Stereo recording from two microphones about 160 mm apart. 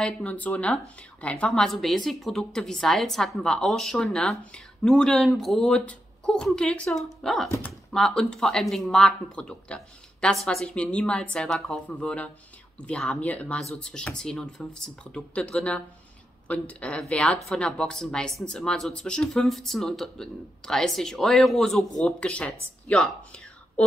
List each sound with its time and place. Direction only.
0.0 s a woman's voice: 10° left (ahead or behind)